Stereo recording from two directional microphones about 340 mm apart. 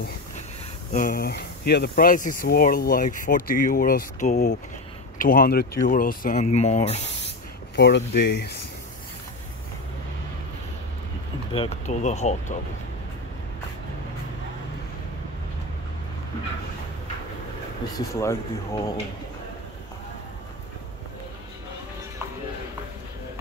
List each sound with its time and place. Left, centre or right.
0.9 s speech: left
7.7 s speech: left
11.5 s speech: centre
17.9 s speech: centre